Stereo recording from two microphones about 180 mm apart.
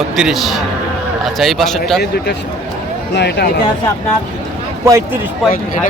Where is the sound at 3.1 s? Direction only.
70° left (ahead or behind).